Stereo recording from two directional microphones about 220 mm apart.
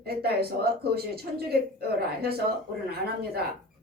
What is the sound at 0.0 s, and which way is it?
Speech, 45° right (ahead or behind).